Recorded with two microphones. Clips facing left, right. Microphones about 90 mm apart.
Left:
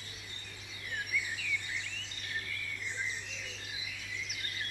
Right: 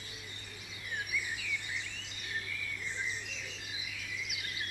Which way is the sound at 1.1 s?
15° right (ahead or behind).